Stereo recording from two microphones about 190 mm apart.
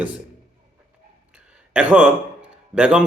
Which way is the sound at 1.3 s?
5° right (ahead or behind).